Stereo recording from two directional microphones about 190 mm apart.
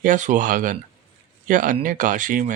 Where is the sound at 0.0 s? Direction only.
45° right (ahead or behind).